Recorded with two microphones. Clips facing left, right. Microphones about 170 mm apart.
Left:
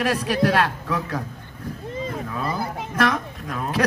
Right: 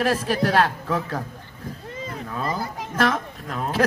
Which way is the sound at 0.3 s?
30° right (ahead or behind).